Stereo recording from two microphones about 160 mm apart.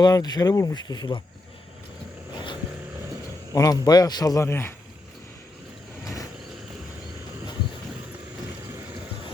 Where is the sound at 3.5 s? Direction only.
25° left (ahead or behind).